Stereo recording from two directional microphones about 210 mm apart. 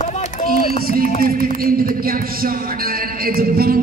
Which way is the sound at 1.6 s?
45° right (ahead or behind).